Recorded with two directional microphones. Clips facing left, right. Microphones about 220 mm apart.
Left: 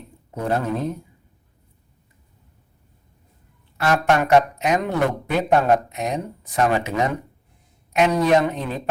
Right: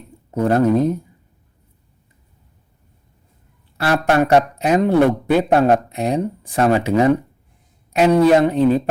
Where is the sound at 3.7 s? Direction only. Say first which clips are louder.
Right 3 dB; 35° right (ahead or behind).